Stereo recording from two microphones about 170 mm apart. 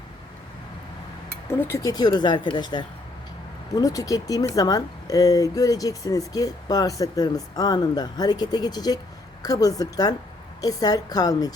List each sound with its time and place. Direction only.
1.5 s speech: 15° left (ahead or behind)